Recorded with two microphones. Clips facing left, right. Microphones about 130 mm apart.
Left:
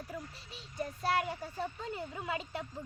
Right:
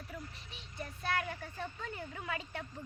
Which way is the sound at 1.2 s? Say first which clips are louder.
Left 4 dB; 25° left (ahead or behind).